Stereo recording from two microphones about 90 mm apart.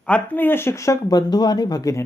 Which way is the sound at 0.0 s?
15° left (ahead or behind).